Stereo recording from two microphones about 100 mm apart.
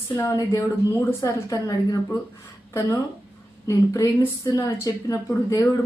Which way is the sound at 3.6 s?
30° left (ahead or behind).